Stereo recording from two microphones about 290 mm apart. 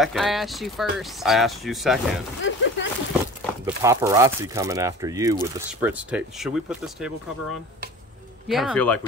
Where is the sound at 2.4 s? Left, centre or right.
Left.